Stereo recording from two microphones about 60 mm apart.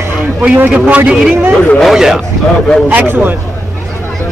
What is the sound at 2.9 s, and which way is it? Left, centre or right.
Speech, right.